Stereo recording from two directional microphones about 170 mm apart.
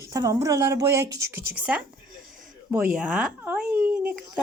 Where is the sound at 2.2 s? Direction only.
55° right (ahead or behind).